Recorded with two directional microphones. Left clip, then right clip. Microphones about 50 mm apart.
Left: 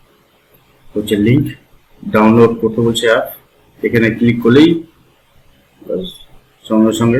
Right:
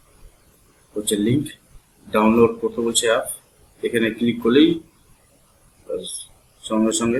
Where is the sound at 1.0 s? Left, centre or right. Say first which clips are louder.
Left 7 dB; right.